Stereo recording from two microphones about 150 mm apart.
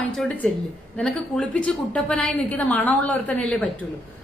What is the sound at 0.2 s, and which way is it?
A woman's voice, centre (ahead or behind).